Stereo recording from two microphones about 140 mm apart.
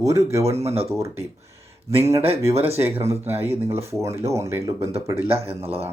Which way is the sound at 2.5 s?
45° right (ahead or behind).